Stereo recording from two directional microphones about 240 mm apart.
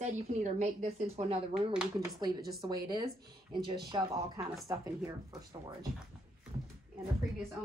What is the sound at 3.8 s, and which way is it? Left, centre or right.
Speech, centre.